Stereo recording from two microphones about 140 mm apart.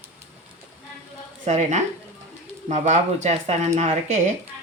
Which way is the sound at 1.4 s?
55° right (ahead or behind).